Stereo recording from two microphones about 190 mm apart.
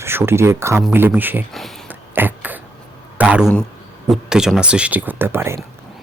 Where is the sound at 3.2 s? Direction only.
5° right (ahead or behind).